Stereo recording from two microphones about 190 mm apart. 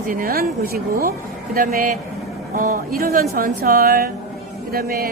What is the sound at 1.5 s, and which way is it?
A woman's voice, 50° right (ahead or behind).